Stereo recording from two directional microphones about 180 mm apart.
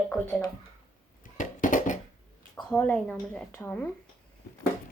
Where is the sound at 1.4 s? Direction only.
45° left (ahead or behind).